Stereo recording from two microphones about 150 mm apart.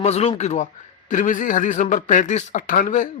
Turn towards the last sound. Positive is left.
turn(degrees=60)  # may be behind; listen again after turning